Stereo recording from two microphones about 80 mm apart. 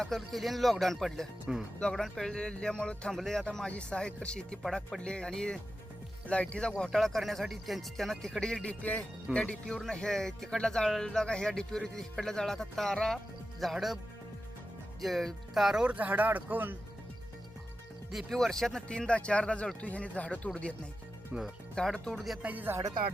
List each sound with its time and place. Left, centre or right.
0.0 s speech: centre
4.6 s speech: centre
15.0 s speech: centre; by 16.7 s right
18.1 s speech: centre
21.3 s speech: centre
21.8 s speech: centre
22.1 s speech: centre
22.4 s speech: right